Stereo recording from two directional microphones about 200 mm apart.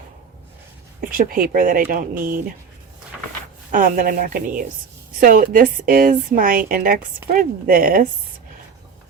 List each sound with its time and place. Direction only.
1.1 s a woman's voice: 45° right (ahead or behind)
3.7 s a woman's voice: 45° right (ahead or behind)